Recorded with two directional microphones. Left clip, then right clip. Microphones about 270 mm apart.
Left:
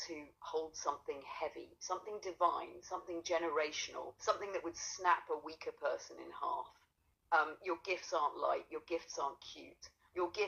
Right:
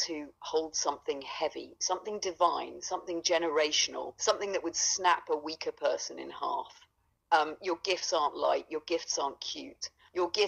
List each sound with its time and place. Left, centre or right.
0.0 s a woman's voice: right